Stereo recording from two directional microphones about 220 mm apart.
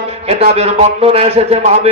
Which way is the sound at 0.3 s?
30° right (ahead or behind).